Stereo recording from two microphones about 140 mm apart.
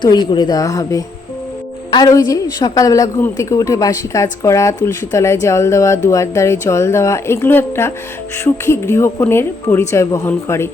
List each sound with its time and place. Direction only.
0.0 s a woman's voice: 30° left (ahead or behind)